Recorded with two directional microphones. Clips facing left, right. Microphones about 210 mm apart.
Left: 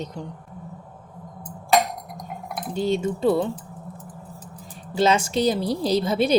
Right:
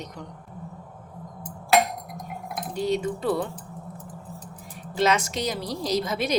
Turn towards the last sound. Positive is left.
turn(degrees=30)  # may be behind; listen again after turning